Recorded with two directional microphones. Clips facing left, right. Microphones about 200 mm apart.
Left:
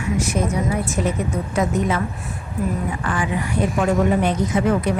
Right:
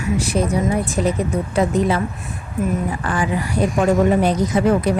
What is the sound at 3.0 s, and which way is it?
Speech, 35° right (ahead or behind).